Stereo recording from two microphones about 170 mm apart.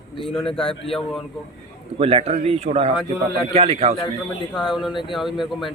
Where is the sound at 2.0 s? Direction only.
35° right (ahead or behind).